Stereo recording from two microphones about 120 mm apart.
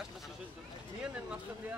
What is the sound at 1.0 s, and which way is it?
Speech, 10° right (ahead or behind).